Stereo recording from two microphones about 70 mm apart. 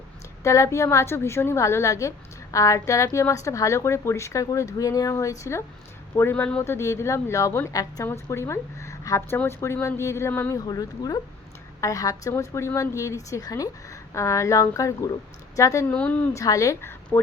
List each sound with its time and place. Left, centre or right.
0.4 s a woman's voice: left
6.3 s speech: left
6.6 s speech: left
7.7 s speech: left
8.1 s a woman's voice: left
10.5 s speech: left
11.8 s a woman's voice: left
12.4 s a woman's voice: left
15.9 s a woman's voice: centre
16.3 s a woman's voice: left
17.1 s speech: left